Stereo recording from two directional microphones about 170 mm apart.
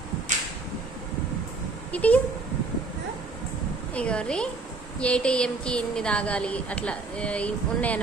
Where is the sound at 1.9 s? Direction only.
10° left (ahead or behind).